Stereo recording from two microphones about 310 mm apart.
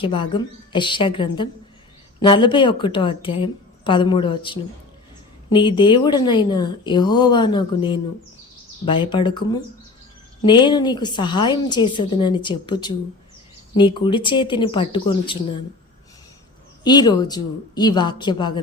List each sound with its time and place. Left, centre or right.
0.0 s a woman's voice: centre
16.8 s a woman's voice: centre